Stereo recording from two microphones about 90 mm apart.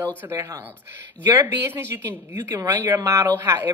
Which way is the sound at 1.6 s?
25° right (ahead or behind).